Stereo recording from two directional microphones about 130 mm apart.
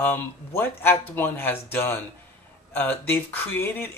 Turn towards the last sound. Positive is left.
turn(degrees=15)  # may be behind; listen again after turning